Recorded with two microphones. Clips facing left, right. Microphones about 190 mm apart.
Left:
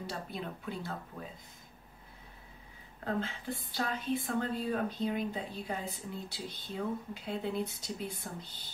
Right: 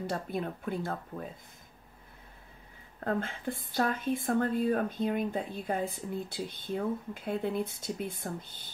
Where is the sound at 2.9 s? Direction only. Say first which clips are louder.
Right 3 dB; 50° right (ahead or behind).